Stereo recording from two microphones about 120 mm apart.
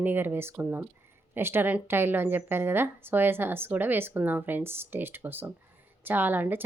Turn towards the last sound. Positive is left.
turn(degrees=-15)  # may be behind; listen again after turning